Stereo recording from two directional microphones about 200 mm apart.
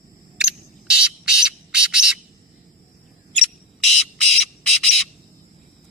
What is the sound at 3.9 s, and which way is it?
Bird, centre (ahead or behind).